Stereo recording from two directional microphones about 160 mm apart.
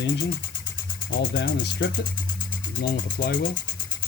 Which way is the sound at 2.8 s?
90° left.